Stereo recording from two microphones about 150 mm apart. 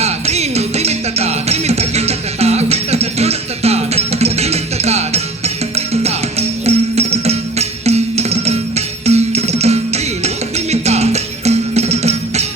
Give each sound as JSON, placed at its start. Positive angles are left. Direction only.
{"t": 0.0, "sound": "music", "side_deg": -45}